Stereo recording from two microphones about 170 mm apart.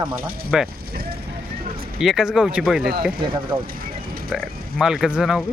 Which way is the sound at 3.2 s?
30° right (ahead or behind).